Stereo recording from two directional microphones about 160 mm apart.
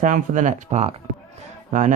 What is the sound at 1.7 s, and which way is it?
Speech, 55° right (ahead or behind).